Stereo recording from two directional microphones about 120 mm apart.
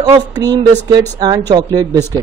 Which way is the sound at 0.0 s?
35° right (ahead or behind).